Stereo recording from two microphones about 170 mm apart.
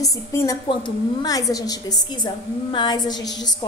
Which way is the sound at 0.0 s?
20° left (ahead or behind).